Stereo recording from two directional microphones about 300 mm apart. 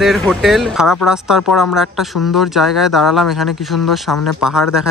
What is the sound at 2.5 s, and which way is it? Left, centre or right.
Speech, centre.